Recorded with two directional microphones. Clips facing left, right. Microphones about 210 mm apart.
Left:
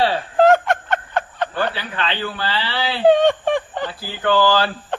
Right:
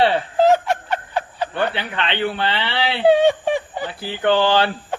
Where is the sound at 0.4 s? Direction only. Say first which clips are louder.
Left 2 dB; 5° right (ahead or behind).